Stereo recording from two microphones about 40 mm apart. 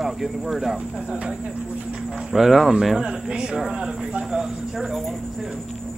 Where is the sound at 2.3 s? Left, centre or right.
Centre.